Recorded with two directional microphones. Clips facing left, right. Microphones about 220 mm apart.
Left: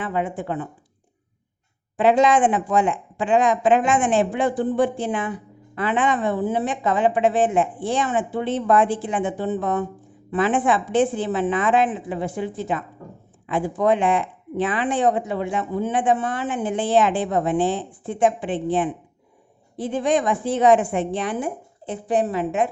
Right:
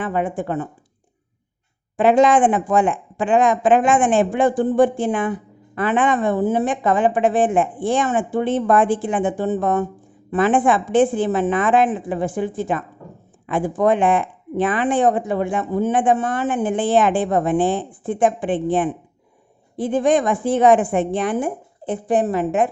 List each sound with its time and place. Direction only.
0.0 s speech: 50° right (ahead or behind)
2.0 s speech: 50° right (ahead or behind)